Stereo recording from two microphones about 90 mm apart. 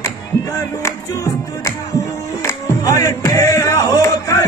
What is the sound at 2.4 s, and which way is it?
Music, 40° left (ahead or behind).